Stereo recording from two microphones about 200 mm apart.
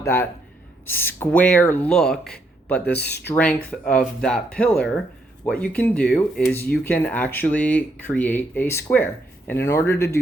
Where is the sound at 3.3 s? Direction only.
5° left (ahead or behind).